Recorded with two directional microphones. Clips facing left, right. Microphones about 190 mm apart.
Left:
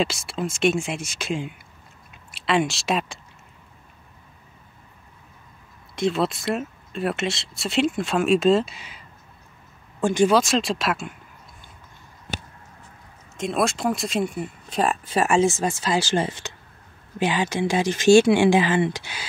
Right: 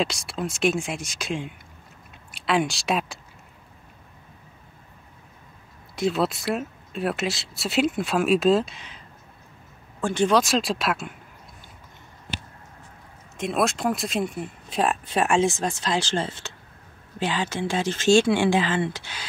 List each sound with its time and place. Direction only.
0.0 s speech: centre (ahead or behind)
5.9 s speech: centre (ahead or behind); by 10.3 s 15° left (ahead or behind)
10.3 s speech: centre (ahead or behind)
13.4 s speech: centre (ahead or behind)